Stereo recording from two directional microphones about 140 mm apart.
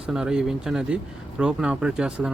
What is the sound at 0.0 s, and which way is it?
Speech, 5° right (ahead or behind).